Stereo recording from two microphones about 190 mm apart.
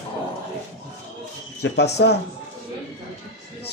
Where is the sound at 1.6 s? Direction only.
60° left (ahead or behind).